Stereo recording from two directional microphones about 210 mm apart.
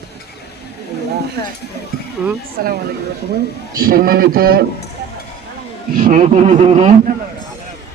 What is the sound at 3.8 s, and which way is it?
Speech, 45° right (ahead or behind).